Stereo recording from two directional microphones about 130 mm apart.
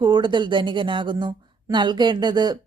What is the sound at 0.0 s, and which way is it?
Speech, 35° right (ahead or behind).